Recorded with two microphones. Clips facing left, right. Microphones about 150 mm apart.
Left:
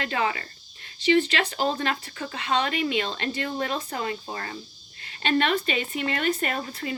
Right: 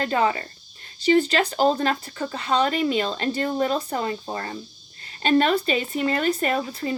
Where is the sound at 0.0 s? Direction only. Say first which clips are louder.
Right 5 dB; 40° right (ahead or behind).